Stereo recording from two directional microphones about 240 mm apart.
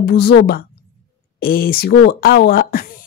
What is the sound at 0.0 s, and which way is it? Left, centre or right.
A woman's voice, left.